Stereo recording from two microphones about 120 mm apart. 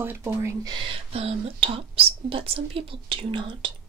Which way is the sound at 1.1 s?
55° right (ahead or behind).